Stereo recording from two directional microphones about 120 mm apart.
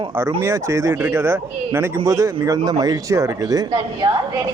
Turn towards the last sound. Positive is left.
turn(degrees=-35)  # may be behind; listen again after turning